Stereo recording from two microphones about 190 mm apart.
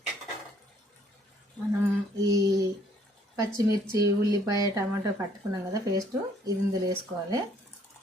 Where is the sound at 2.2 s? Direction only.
20° right (ahead or behind).